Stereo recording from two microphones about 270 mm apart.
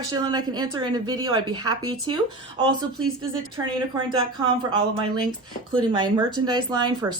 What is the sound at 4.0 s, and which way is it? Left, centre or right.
Speech, centre.